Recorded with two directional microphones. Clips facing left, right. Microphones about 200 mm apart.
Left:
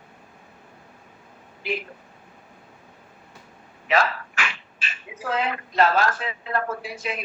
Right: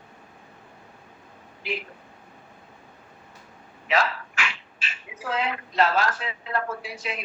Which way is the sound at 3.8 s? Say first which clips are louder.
Left 2 dB; 50° left (ahead or behind).